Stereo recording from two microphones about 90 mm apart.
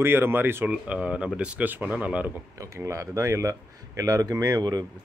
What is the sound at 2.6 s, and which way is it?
Speech, 35° right (ahead or behind).